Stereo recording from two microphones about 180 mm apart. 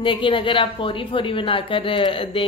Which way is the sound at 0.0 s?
30° left (ahead or behind).